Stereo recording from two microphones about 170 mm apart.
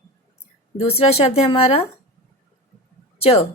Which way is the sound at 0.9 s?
35° left (ahead or behind).